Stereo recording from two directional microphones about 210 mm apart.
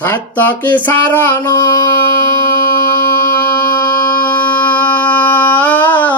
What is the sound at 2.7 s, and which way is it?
Music, 10° left (ahead or behind).